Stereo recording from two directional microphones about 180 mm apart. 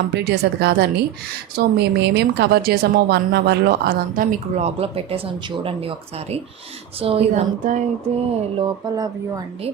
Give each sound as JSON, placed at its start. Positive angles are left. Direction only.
{"t": 0.1, "sound": "a woman's voice", "side_deg": -65}
{"t": 4.5, "sound": "speech", "side_deg": -35}